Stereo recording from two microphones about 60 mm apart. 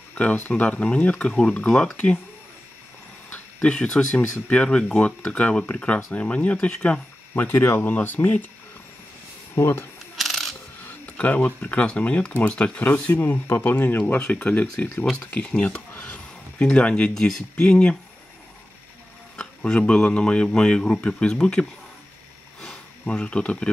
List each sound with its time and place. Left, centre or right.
0.1 s speech: left
3.6 s speech: centre
7.5 s speech: left
7.8 s speech: left
9.6 s speech: left
10.1 s coin: centre
10.8 s speech: left
12.8 s speech: left
15.1 s speech: centre
15.9 s a sound: left
17.6 s speech: centre
19.3 s speech: centre
22.6 s a sound: centre